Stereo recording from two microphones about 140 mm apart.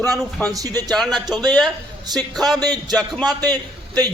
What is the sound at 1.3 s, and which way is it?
Speech, 30° right (ahead or behind).